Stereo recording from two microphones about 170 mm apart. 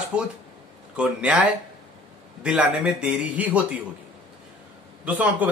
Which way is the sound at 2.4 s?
5° right (ahead or behind).